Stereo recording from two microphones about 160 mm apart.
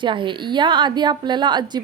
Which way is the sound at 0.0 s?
30° right (ahead or behind).